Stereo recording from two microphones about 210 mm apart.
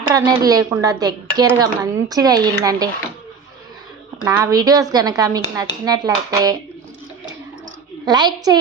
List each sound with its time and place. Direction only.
0.1 s speech: 20° right (ahead or behind)
4.2 s speech: 15° right (ahead or behind)
8.0 s speech: 20° right (ahead or behind)